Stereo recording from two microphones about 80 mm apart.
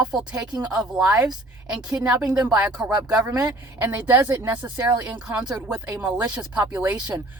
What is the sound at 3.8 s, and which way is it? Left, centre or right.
A woman's voice, right.